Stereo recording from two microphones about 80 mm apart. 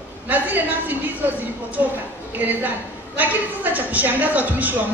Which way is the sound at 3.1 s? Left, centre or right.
Right.